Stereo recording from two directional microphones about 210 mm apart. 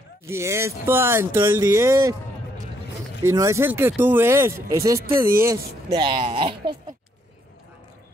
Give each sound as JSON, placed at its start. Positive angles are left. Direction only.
{"t": 0.3, "sound": "speech", "side_deg": -10}
{"t": 3.2, "sound": "speech", "side_deg": -15}